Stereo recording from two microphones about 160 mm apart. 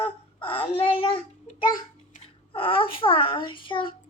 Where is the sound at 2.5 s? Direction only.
35° left (ahead or behind).